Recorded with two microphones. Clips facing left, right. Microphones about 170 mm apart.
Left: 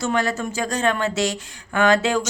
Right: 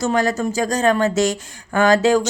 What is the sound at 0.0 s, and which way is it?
Speech, 40° right (ahead or behind).